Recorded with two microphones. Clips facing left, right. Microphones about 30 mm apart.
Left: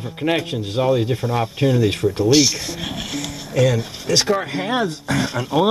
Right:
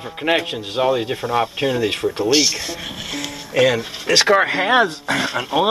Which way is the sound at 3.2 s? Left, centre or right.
Right.